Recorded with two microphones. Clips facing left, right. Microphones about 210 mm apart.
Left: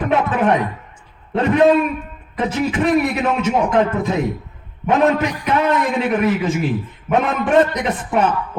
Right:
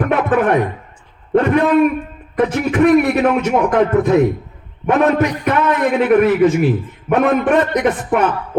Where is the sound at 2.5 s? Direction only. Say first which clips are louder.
Right 4 dB; 60° right (ahead or behind).